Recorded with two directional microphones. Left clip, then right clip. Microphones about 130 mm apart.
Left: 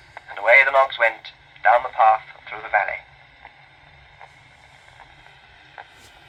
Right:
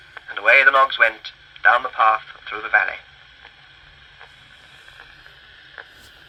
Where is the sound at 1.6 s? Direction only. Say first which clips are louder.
Even; 35° right (ahead or behind).